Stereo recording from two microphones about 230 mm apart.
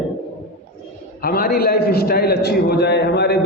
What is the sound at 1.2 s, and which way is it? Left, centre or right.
A man's voice, left.